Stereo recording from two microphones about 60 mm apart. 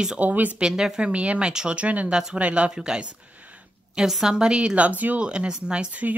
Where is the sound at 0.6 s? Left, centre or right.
Centre.